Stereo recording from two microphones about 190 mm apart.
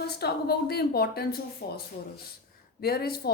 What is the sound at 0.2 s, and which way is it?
Speech, 55° left (ahead or behind).